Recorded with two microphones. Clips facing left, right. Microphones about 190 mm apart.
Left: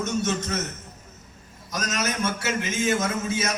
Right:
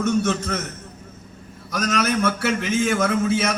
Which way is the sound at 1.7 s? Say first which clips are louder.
Right 6 dB; 60° right (ahead or behind).